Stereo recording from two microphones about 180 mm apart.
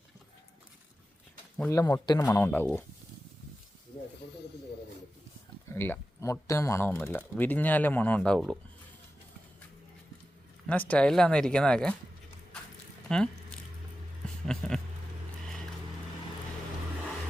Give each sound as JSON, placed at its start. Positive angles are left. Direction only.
{"t": 1.7, "sound": "speech", "side_deg": 20}
{"t": 4.2, "sound": "snake", "side_deg": 70}
{"t": 5.6, "sound": "speech", "side_deg": 15}
{"t": 10.7, "sound": "speech", "side_deg": 5}
{"t": 13.1, "sound": "speech", "side_deg": 5}
{"t": 14.4, "sound": "vehicle", "side_deg": 5}